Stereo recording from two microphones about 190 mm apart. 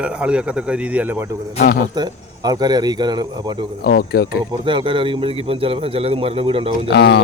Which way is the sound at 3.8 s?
55° left (ahead or behind).